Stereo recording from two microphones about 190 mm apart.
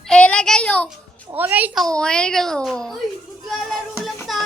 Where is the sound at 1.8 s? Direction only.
5° left (ahead or behind).